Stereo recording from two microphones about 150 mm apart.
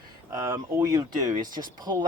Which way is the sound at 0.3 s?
20° right (ahead or behind).